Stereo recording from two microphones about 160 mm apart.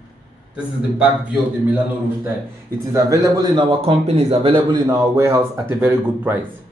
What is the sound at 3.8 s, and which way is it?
Speech, 40° right (ahead or behind).